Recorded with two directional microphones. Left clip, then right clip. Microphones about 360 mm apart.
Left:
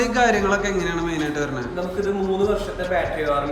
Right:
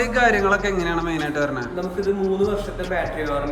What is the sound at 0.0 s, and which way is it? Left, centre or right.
Speech, centre.